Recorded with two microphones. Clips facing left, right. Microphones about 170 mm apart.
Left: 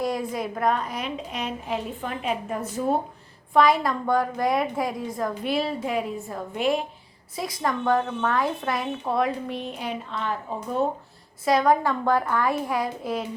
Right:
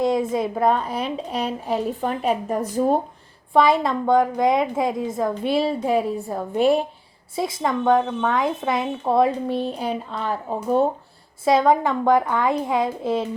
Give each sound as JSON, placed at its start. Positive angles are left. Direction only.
{"t": 0.0, "sound": "a woman's voice", "side_deg": -25}
{"t": 3.5, "sound": "a child's voice", "side_deg": -25}
{"t": 11.4, "sound": "a child's voice", "side_deg": -25}